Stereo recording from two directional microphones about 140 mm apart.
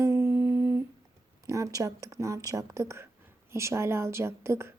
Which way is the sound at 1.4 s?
25° right (ahead or behind).